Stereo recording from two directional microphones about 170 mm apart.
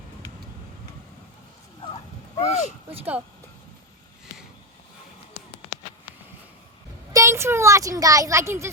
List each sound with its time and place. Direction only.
2.5 s speech: 40° left (ahead or behind)
7.1 s speech: 15° right (ahead or behind)